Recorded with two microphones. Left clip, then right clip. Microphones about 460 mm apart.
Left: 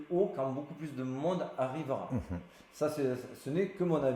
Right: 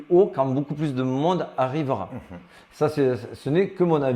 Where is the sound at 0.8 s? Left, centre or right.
Right.